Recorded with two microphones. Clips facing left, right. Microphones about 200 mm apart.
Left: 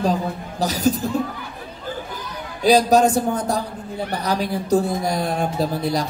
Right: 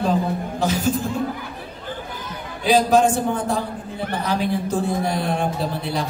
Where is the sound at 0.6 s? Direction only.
40° left (ahead or behind).